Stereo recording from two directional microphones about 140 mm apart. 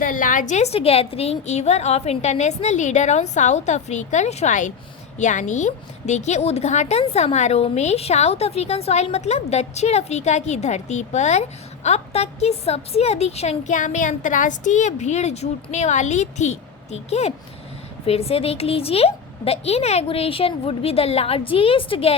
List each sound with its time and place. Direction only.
0.0 s a woman's voice: 70° left (ahead or behind); by 22.1 s 40° left (ahead or behind)